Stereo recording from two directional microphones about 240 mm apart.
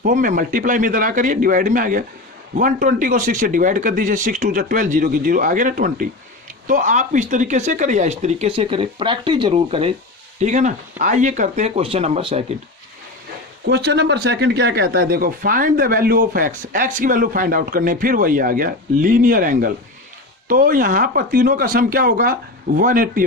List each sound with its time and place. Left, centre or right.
0.0 s speech: right
13.7 s speech: right